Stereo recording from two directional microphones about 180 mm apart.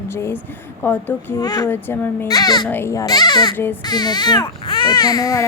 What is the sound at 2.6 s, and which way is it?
A woman's voice, 10° left (ahead or behind).